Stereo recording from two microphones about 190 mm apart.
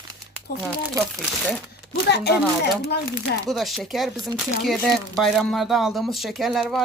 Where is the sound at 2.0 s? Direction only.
60° left (ahead or behind).